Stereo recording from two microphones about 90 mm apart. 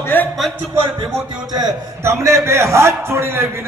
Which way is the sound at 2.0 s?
30° right (ahead or behind).